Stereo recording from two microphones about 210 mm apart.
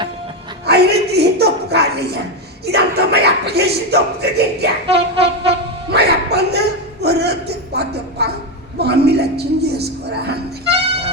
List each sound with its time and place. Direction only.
0.6 s a sound: 50° right (ahead or behind)
2.6 s speech: 50° right (ahead or behind)
5.1 s train: 25° right (ahead or behind)
5.5 s a sound: 50° right (ahead or behind)
8.8 s speech: 50° right (ahead or behind)
10.7 s music: 30° right (ahead or behind)